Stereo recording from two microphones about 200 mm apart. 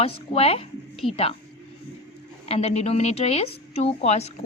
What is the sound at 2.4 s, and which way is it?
A woman's voice, 30° left (ahead or behind).